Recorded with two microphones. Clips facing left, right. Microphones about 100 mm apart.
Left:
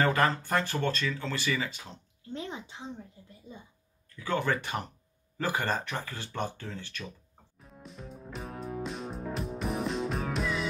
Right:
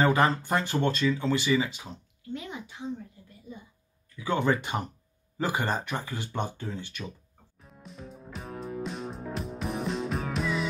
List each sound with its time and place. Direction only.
0.0 s speech: 15° right (ahead or behind)
2.2 s a sound: 30° left (ahead or behind)
4.2 s speech: 15° right (ahead or behind)
7.5 s music: centre (ahead or behind)